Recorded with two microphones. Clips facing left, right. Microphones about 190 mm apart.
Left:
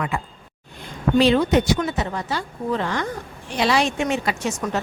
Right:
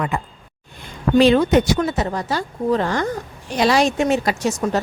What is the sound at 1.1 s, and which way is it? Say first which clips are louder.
Speech: right 3 dB; 50° right (ahead or behind).